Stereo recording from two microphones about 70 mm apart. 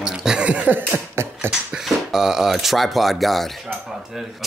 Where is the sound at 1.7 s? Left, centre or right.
Centre.